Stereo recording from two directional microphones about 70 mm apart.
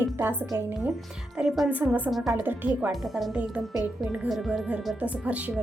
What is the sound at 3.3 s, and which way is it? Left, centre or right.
Speech, centre.